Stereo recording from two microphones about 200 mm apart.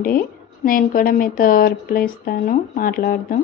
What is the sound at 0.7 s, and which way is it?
A woman's voice, 45° left (ahead or behind).